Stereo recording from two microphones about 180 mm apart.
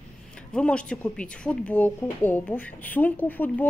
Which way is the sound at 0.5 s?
5° left (ahead or behind).